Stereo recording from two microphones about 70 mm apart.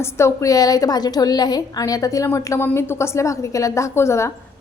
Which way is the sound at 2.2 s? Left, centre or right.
Left.